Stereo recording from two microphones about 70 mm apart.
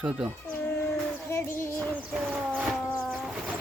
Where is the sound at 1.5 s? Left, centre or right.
Left.